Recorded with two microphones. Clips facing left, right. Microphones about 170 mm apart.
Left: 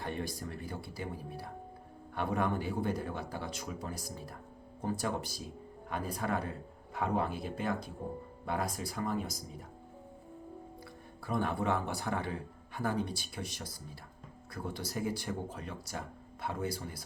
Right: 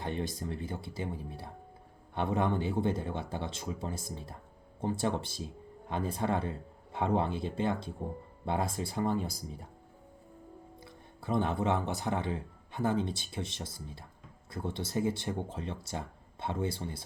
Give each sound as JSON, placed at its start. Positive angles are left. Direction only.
{"t": 0.0, "sound": "a man's voice", "side_deg": -20}
{"t": 11.2, "sound": "a man's voice", "side_deg": -20}